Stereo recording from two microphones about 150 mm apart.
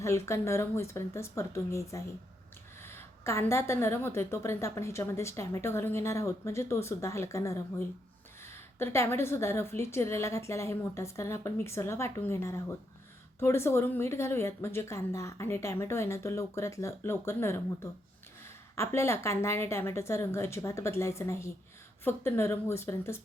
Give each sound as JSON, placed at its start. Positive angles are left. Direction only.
{"t": 0.0, "sound": "a woman's voice", "side_deg": 20}
{"t": 18.8, "sound": "a woman's voice", "side_deg": 15}